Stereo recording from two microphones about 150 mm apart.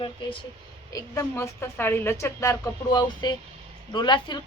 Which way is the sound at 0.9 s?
20° left (ahead or behind).